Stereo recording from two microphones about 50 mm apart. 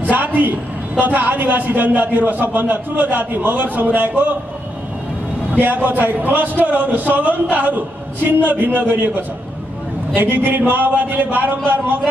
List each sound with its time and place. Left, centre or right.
0.0 s a man's voice: right
5.6 s a man's voice: right